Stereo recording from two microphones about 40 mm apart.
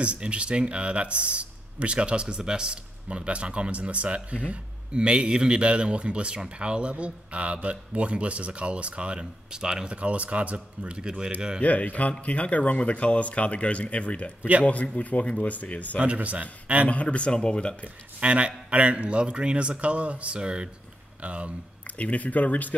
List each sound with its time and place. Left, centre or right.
0.0 s a man's voice: right
9.9 s a man's voice: right
11.1 s speech: centre
11.6 s speech: left
16.0 s a man's voice: right
16.9 s speech: left
17.8 s a man's voice: right
20.3 s speech: right
21.9 s speech: left